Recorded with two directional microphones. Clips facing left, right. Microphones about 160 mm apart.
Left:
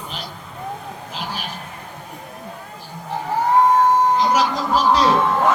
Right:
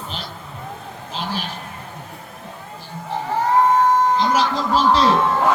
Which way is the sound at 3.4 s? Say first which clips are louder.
Left 1 dB; 10° left (ahead or behind).